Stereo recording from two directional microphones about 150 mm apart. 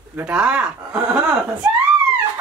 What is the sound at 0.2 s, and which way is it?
Speech, 10° right (ahead or behind).